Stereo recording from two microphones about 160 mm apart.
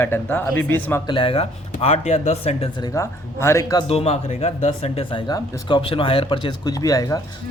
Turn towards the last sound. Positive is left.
turn(degrees=20)  # may be behind; listen again after turning